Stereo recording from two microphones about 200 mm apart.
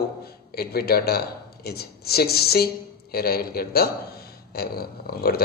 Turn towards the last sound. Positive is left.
turn(degrees=50)  # may be behind; listen again after turning